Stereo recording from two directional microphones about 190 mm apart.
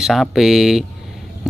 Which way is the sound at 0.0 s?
Centre (ahead or behind).